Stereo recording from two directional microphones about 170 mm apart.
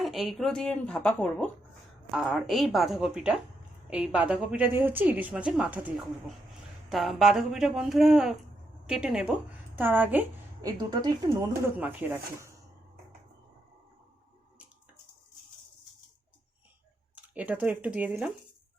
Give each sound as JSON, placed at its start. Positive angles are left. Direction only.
{"t": 0.0, "sound": "a woman's voice", "side_deg": 0}
{"t": 10.6, "sound": "speech", "side_deg": -20}
{"t": 11.8, "sound": "a woman's voice", "side_deg": -10}
{"t": 17.2, "sound": "speech", "side_deg": -10}